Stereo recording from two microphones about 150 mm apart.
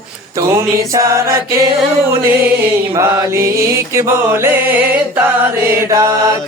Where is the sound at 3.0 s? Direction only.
20° right (ahead or behind).